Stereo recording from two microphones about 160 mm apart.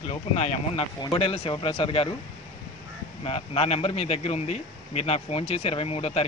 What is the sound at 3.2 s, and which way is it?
A man's voice, 35° left (ahead or behind).